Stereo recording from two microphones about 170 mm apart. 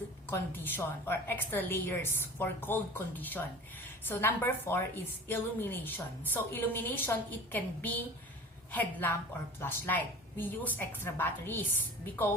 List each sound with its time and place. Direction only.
0.3 s a woman's voice: 10° left (ahead or behind)